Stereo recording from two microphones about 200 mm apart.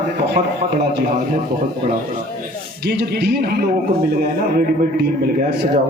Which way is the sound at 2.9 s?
55° right (ahead or behind).